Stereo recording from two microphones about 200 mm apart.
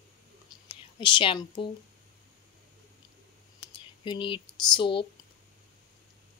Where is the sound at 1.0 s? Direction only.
25° left (ahead or behind).